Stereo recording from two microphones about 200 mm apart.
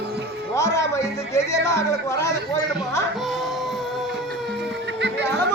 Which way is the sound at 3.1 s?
Centre (ahead or behind).